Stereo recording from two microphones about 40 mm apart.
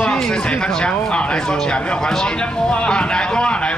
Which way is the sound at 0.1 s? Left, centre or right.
Centre.